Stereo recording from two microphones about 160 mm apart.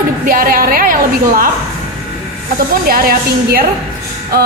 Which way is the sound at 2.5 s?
65° right (ahead or behind).